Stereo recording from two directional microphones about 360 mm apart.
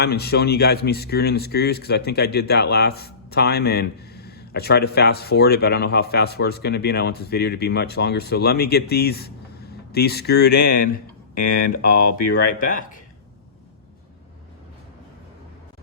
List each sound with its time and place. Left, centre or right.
0.0 s speech: left